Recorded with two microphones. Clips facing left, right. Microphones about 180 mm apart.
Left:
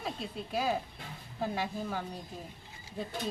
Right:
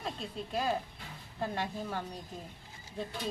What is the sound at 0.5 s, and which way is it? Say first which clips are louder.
Speech: left 1 dB; 5° left (ahead or behind).